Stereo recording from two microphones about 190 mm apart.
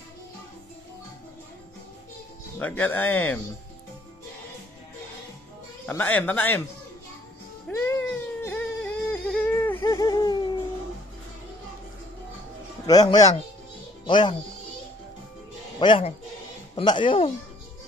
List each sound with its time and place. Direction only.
2.6 s speech: 10° left (ahead or behind)
5.9 s speech: 10° left (ahead or behind)
7.6 s a sound: 10° left (ahead or behind)
12.8 s speech: 20° left (ahead or behind)
15.8 s speech: 25° left (ahead or behind)